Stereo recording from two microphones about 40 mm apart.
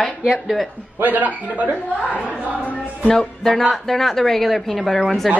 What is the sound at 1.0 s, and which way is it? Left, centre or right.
Speech, right.